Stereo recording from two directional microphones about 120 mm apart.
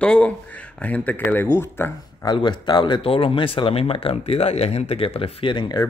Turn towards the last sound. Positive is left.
turn(degrees=35)  # may be behind; listen again after turning